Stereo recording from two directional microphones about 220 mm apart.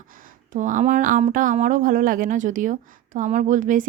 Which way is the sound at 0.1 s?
40° right (ahead or behind).